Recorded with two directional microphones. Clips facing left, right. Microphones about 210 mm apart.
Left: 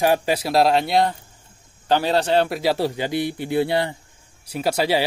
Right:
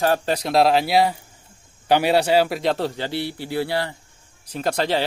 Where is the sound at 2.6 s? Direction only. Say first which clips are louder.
Left 1 dB; 10° left (ahead or behind).